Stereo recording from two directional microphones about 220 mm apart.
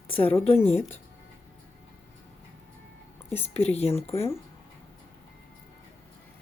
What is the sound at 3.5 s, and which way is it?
Speech, 30° left (ahead or behind).